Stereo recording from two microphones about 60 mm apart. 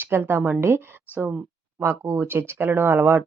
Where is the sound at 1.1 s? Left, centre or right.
Right.